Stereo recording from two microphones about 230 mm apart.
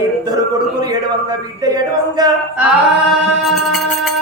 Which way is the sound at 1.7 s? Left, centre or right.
Centre.